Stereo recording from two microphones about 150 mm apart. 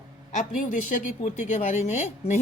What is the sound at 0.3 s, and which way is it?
A woman's voice, 55° left (ahead or behind).